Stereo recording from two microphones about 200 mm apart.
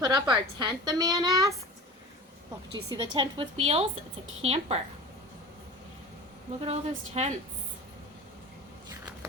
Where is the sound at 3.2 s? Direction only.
30° right (ahead or behind).